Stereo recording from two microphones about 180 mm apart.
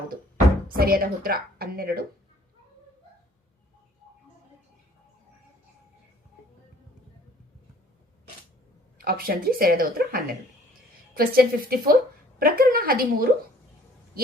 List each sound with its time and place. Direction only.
0.8 s a woman's voice: 55° right (ahead or behind)
9.0 s a woman's voice: 55° right (ahead or behind)